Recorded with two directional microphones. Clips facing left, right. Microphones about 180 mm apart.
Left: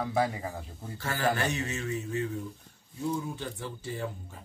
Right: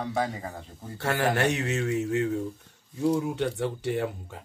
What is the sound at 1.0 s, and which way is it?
Speech, 70° right (ahead or behind).